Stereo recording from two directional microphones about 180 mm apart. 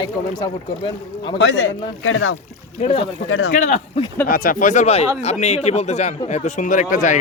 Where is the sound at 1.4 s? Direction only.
90° left.